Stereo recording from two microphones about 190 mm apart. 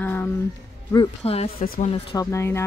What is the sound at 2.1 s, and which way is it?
Speech, 15° left (ahead or behind).